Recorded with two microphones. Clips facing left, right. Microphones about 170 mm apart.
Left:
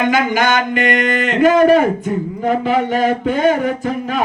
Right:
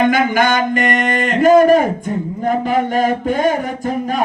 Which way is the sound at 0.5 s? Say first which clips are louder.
Even; 45° right (ahead or behind).